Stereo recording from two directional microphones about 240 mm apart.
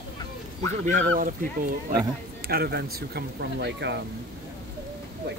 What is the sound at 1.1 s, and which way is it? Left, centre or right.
Speech, right.